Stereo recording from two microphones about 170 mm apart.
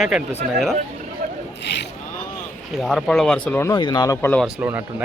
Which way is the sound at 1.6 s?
85° left.